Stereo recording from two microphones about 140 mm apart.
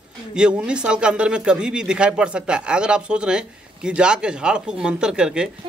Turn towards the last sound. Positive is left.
turn(degrees=-5)  # may be behind; listen again after turning